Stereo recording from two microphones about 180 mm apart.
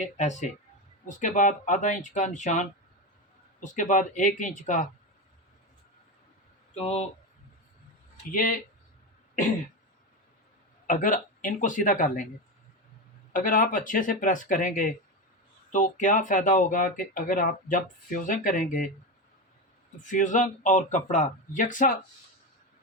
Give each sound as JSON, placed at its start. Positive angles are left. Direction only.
{"t": 0.0, "sound": "speech", "side_deg": 40}
{"t": 6.7, "sound": "speech", "side_deg": 35}
{"t": 8.1, "sound": "speech", "side_deg": 50}
{"t": 10.8, "sound": "speech", "side_deg": 45}
{"t": 13.3, "sound": "speech", "side_deg": 50}
{"t": 20.1, "sound": "speech", "side_deg": 45}